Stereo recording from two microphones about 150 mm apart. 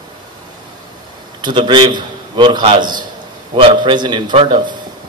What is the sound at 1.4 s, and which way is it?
A man's voice, 30° right (ahead or behind).